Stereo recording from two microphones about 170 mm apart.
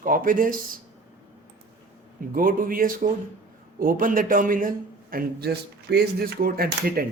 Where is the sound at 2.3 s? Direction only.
55° right (ahead or behind).